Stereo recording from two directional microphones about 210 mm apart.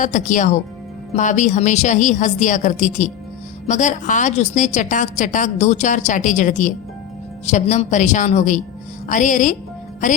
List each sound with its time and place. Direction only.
0.0 s a woman's voice: 35° left (ahead or behind)